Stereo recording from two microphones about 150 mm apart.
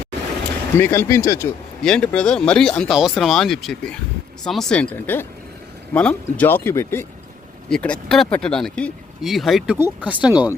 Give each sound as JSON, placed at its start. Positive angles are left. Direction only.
{"t": 0.8, "sound": "speech", "side_deg": 15}
{"t": 1.8, "sound": "speech", "side_deg": 5}
{"t": 9.7, "sound": "speech", "side_deg": -15}